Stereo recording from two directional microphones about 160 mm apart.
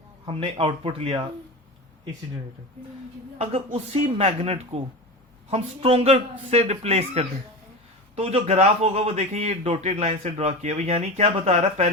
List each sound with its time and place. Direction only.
0.3 s a man's voice: 35° right (ahead or behind)
3.3 s a man's voice: 40° right (ahead or behind)